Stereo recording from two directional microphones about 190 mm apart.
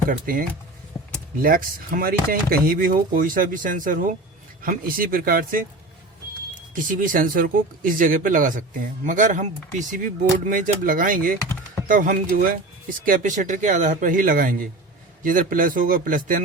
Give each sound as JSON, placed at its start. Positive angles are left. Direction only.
{"t": 0.1, "sound": "speech", "side_deg": -45}
{"t": 0.9, "sound": "a sound", "side_deg": 25}
{"t": 1.4, "sound": "speech", "side_deg": -50}